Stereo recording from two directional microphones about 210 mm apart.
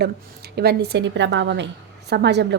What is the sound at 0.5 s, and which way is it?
A woman's voice, 50° right (ahead or behind).